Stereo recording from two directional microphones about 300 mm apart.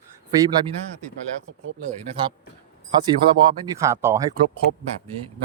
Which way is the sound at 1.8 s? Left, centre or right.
Centre.